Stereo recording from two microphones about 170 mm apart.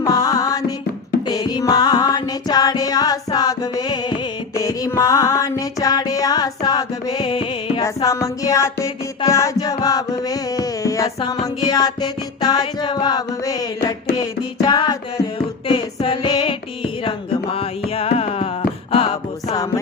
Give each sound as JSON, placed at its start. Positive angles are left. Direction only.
{"t": 0.0, "sound": "music", "side_deg": 20}
{"t": 7.9, "sound": "music", "side_deg": 20}
{"t": 15.6, "sound": "a sound", "side_deg": 30}
{"t": 17.0, "sound": "music", "side_deg": 30}
{"t": 19.5, "sound": "music", "side_deg": 20}